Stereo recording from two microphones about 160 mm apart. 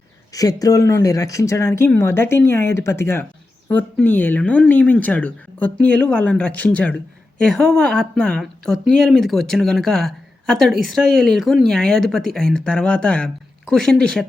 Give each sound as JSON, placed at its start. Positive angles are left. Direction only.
{"t": 0.3, "sound": "speech", "side_deg": 20}